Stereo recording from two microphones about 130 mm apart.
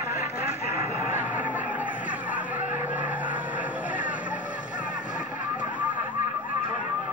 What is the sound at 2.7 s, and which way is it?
Vehicle, 15° right (ahead or behind).